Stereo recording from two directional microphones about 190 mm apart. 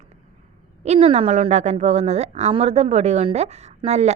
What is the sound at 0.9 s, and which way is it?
A woman's voice, 35° right (ahead or behind).